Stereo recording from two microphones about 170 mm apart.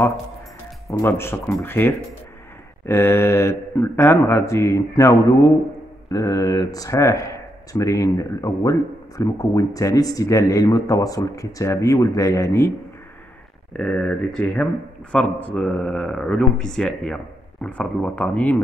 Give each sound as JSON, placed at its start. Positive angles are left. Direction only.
{"t": 0.8, "sound": "speech", "side_deg": 15}
{"t": 13.7, "sound": "speech", "side_deg": 5}